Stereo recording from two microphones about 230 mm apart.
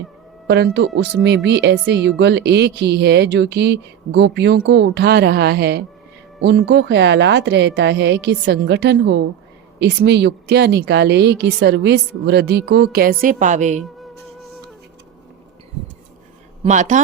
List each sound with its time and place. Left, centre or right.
0.4 s a woman's voice: right
16.6 s speech: right